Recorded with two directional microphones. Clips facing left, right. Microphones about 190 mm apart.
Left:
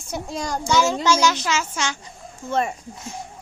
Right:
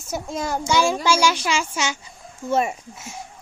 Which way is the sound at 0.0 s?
5° right (ahead or behind).